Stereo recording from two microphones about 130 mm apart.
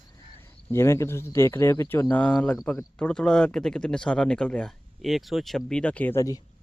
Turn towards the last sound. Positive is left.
turn(degrees=25)  # may be behind; listen again after turning